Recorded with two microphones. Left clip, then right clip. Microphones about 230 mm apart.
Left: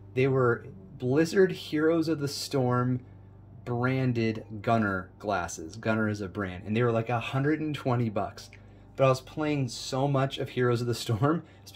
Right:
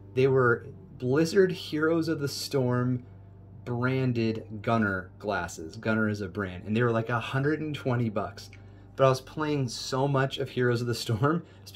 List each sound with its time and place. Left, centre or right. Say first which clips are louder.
0.1 s speech: right 2 dB; centre